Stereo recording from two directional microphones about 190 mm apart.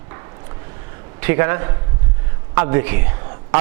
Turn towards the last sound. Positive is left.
turn(degrees=-25)  # may be behind; listen again after turning